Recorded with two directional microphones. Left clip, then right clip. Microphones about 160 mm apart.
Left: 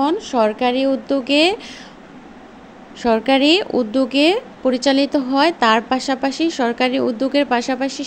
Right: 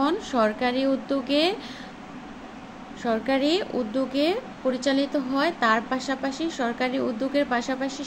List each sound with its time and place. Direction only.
0.0 s speech: 35° left (ahead or behind)
3.0 s a woman's voice: 55° left (ahead or behind)